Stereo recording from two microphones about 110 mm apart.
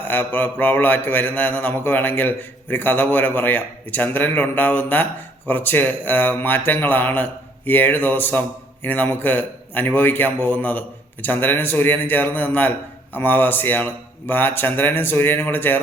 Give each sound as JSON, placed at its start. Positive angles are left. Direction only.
{"t": 0.1, "sound": "a man's voice", "side_deg": 20}